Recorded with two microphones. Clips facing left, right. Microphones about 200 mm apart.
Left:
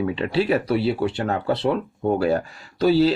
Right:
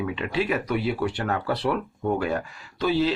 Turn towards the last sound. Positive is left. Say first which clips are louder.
# left 6 dB
turn(degrees=40)  # may be behind; listen again after turning